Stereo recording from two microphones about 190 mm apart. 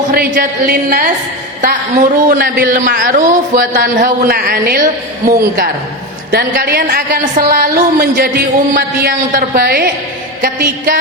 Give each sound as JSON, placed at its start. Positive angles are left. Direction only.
{"t": 0.1, "sound": "a woman's voice", "side_deg": -50}